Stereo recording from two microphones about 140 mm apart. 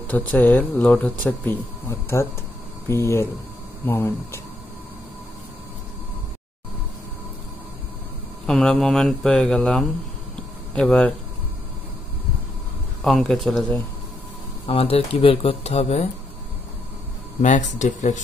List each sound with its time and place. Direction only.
0.0 s speech: 10° left (ahead or behind)
8.5 s speech: 5° left (ahead or behind)
13.0 s speech: 5° left (ahead or behind)
14.7 s speech: 45° left (ahead or behind)
17.4 s speech: 60° left (ahead or behind)